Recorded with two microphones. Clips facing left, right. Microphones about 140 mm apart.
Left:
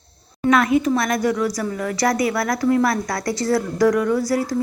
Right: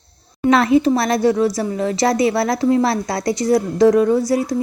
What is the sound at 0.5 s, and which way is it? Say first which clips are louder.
Speech: right 3 dB; 30° right (ahead or behind).